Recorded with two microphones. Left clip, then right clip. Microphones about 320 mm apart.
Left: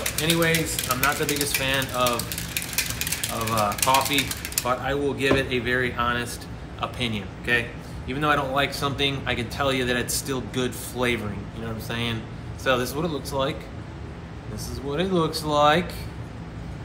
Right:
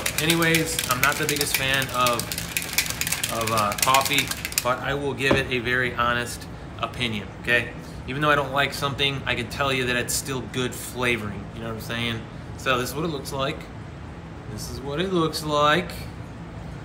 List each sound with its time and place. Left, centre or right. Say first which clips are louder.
0.5 s speech: right 2 dB; centre
2.2 s a sound: right 2 dB; centre
3.6 s speech: even; centre
14.9 s speech: even; centre